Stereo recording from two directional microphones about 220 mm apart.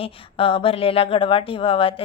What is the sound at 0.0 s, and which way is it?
Speech, 25° left (ahead or behind).